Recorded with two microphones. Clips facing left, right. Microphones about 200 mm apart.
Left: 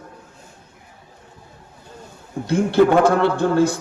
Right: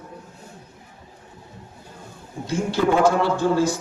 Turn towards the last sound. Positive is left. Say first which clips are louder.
# left 2 dB
turn(degrees=60)  # may be behind; listen again after turning